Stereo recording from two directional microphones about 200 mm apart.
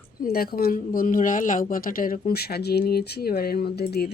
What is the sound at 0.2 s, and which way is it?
A woman's voice, 50° left (ahead or behind).